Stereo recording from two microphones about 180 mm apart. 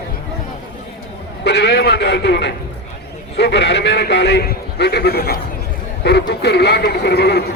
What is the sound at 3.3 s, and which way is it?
A man's voice, 70° left (ahead or behind).